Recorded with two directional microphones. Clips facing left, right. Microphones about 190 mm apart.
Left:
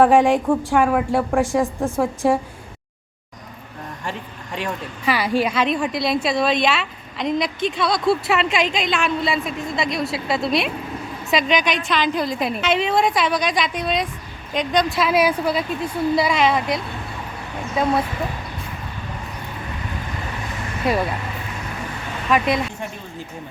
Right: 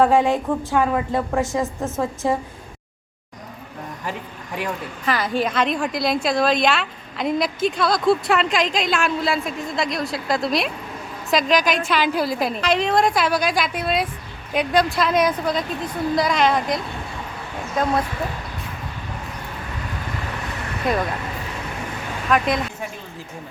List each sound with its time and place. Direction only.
0.0 s speech: 15° left (ahead or behind)
5.0 s a woman's voice: 5° left (ahead or behind)
20.8 s a woman's voice: 5° left (ahead or behind)
22.3 s speech: centre (ahead or behind)